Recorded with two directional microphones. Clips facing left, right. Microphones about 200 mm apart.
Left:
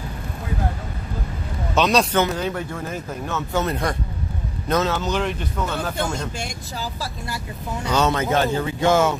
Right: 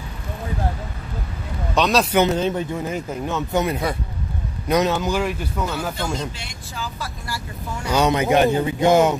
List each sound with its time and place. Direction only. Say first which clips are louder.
1.8 s speech: even; centre (ahead or behind)
2.1 s speech: right 3 dB; 20° right (ahead or behind)
6.3 s speech: left 4 dB; 45° left (ahead or behind)
7.0 s speech: left 1 dB; 20° left (ahead or behind)
7.8 s speech: right 2 dB; 10° right (ahead or behind)